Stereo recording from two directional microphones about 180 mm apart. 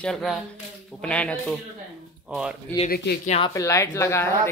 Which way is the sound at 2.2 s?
5° right (ahead or behind).